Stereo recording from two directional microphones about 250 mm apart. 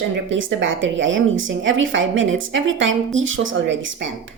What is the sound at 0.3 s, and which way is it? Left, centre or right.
A woman's voice, right.